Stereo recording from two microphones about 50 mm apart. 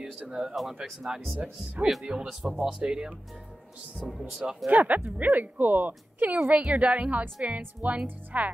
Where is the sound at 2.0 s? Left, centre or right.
Centre.